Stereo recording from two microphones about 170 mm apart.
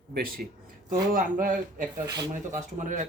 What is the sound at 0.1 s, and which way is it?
A man's voice, 60° right (ahead or behind).